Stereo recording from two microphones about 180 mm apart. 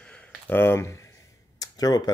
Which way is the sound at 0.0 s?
10° left (ahead or behind).